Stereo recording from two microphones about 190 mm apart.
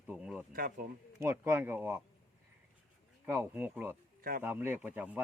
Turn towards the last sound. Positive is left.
turn(degrees=-10)  # may be behind; listen again after turning